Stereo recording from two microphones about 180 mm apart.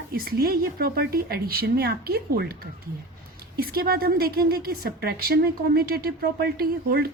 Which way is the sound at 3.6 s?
55° right (ahead or behind).